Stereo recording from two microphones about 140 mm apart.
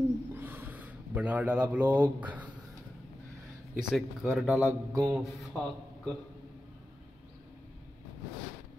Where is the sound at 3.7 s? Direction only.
Centre (ahead or behind).